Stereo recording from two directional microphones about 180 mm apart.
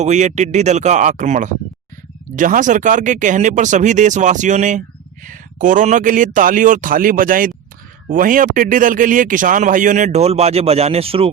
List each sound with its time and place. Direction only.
0.0 s speech: 40° right (ahead or behind)